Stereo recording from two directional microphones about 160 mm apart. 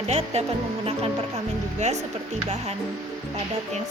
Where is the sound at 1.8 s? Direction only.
45° right (ahead or behind).